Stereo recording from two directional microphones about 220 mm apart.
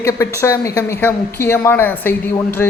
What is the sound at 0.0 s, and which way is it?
Speech, 15° left (ahead or behind).